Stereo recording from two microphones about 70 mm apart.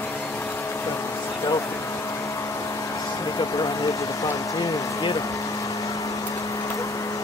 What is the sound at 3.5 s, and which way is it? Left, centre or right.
Vehicle, left.